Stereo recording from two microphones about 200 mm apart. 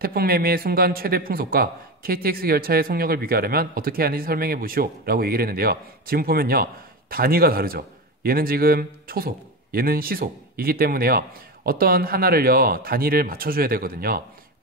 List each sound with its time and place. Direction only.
0.0 s speech: 50° right (ahead or behind)